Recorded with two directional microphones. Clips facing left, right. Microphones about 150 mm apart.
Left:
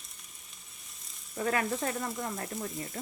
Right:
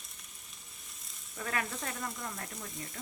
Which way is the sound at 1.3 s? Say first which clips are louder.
Left 7 dB; 30° left (ahead or behind).